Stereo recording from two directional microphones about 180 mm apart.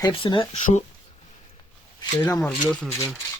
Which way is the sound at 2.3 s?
5° left (ahead or behind).